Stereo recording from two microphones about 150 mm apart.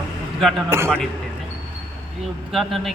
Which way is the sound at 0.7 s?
15° right (ahead or behind).